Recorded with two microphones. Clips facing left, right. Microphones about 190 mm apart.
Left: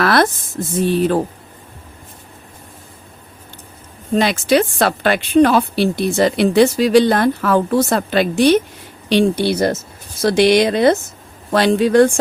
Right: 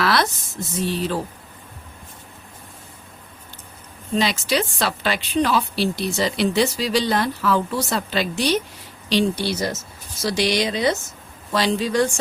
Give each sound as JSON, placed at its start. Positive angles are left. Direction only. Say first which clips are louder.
{"t": 0.0, "sound": "a sound", "louder": "left 6 dB", "side_deg": 50}
{"t": 0.8, "sound": "speech", "louder": "left 8 dB", "side_deg": 55}
{"t": 4.1, "sound": "a woman's voice", "louder": "left 7 dB", "side_deg": 55}